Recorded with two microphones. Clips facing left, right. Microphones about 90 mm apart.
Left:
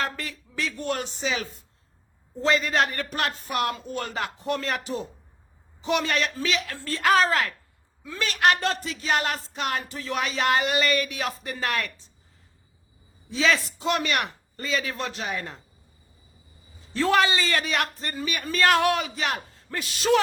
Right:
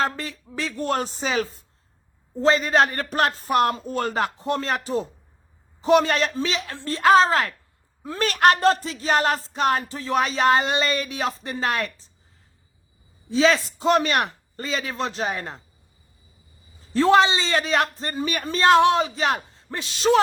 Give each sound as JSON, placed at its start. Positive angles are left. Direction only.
{"t": 0.0, "sound": "speech", "side_deg": -35}
{"t": 13.2, "sound": "speech", "side_deg": -35}
{"t": 16.9, "sound": "speech", "side_deg": -30}